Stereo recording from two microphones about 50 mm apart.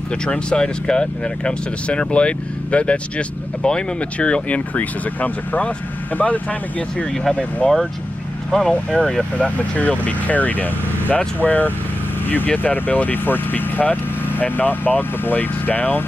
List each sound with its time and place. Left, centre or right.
0.2 s speech: centre
8.5 s speech: centre
9.6 s speech: left